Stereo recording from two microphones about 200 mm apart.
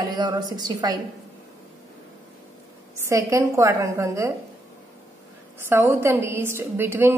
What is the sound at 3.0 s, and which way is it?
A woman's voice, 15° right (ahead or behind).